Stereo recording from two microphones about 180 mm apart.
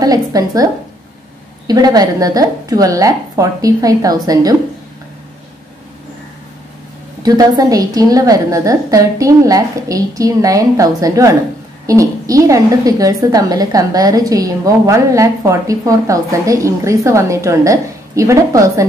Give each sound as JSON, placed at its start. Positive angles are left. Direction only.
{"t": 0.0, "sound": "a woman's voice", "side_deg": -20}
{"t": 1.7, "sound": "a woman's voice", "side_deg": -20}
{"t": 7.2, "sound": "a woman's voice", "side_deg": -20}